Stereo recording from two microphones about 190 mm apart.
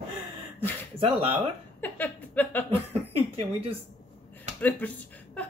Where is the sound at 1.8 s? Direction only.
10° left (ahead or behind).